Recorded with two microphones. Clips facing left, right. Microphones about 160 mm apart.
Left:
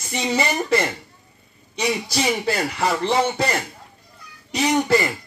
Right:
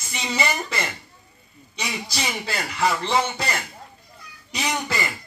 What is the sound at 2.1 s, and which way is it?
Speech, 50° left (ahead or behind).